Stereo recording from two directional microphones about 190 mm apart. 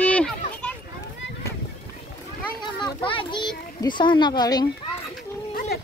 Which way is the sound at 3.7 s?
25° left (ahead or behind).